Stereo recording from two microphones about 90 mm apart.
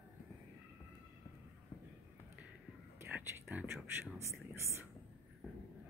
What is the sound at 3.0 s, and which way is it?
Whispering, 25° right (ahead or behind).